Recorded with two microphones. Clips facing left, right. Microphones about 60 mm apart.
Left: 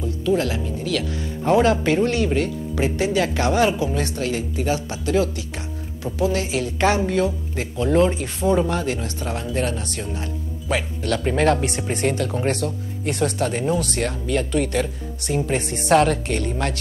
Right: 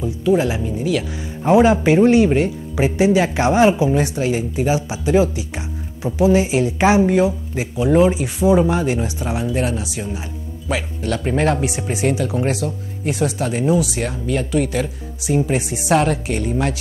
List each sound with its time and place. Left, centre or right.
0.0 s speech: centre